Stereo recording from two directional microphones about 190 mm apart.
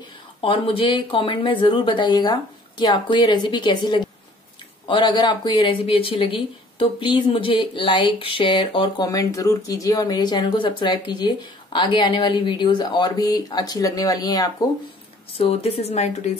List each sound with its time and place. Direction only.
0.4 s speech: 30° left (ahead or behind)
15.3 s a woman's voice: 30° left (ahead or behind)